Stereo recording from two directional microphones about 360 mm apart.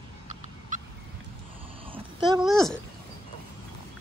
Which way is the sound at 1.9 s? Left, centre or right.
Centre.